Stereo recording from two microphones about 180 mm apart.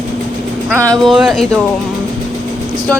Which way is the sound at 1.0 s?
Centre (ahead or behind).